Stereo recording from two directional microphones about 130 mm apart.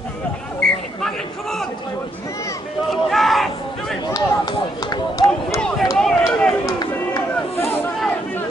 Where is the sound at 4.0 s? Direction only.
30° left (ahead or behind).